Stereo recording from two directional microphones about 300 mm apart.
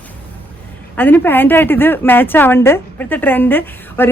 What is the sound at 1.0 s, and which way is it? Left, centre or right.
A woman's voice, centre.